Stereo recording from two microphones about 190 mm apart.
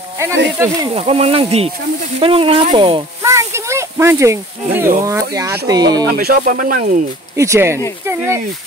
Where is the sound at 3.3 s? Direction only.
15° right (ahead or behind).